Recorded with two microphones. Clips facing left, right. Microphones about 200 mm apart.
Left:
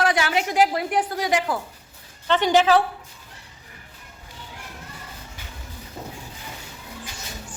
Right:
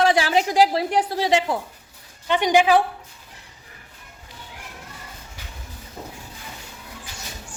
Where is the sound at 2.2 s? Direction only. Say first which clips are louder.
Even; 15° right (ahead or behind).